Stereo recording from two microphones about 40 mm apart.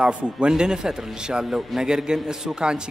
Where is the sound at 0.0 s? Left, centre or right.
Right.